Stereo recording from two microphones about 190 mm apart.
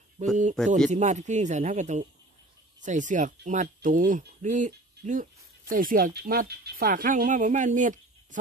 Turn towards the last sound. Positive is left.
turn(degrees=-40)  # may be behind; listen again after turning